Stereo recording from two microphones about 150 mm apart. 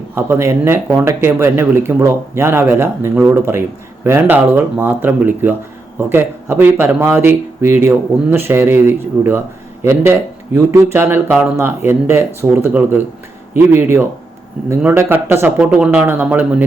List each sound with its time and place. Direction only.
0.1 s speech: 15° right (ahead or behind)